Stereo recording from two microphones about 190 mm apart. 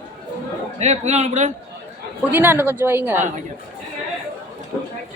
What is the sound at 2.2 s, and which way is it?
Speech, 10° right (ahead or behind).